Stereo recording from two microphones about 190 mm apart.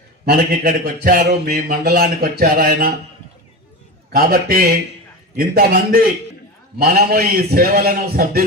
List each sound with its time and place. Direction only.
0.3 s speech: 50° right (ahead or behind)
4.1 s speech: 55° right (ahead or behind)